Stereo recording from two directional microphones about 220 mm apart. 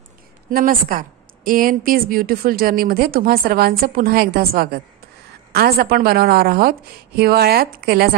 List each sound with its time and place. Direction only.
0.5 s a woman's voice: 40° right (ahead or behind)